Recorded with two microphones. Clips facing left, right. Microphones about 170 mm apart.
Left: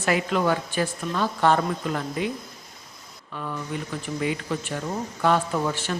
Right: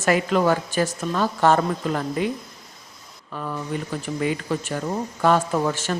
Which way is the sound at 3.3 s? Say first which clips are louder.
Right 3 dB; 45° right (ahead or behind).